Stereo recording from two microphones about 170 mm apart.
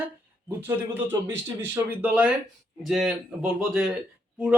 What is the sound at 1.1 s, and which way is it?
A man's voice, 20° right (ahead or behind).